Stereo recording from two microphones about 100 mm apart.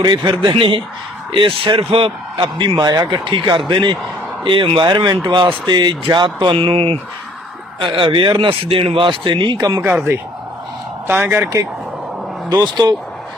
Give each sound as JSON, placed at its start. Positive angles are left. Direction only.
{"t": 0.0, "sound": "a man's voice", "side_deg": -50}
{"t": 4.9, "sound": "speech", "side_deg": -45}
{"t": 7.8, "sound": "a man's voice", "side_deg": -55}
{"t": 9.8, "sound": "speech", "side_deg": -20}
{"t": 12.7, "sound": "speech", "side_deg": -40}